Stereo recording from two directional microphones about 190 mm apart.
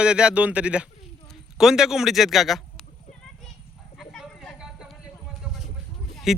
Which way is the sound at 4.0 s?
Centre (ahead or behind).